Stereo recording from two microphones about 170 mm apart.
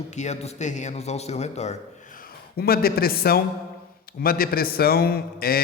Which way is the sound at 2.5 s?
65° left (ahead or behind).